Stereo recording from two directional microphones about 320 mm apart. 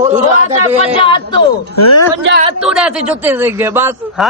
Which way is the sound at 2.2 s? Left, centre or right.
Right.